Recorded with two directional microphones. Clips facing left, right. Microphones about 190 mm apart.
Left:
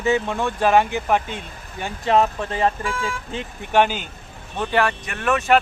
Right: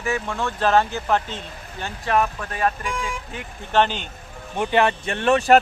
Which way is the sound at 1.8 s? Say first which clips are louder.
Left 3 dB; 25° left (ahead or behind).